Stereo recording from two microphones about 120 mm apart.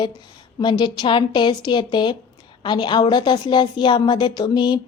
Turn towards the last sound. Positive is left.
turn(degrees=40)  # may be behind; listen again after turning